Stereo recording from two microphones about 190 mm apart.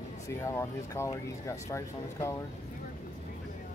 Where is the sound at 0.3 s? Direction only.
15° left (ahead or behind).